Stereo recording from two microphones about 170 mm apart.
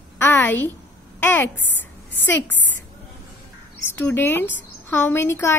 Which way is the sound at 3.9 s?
10° left (ahead or behind).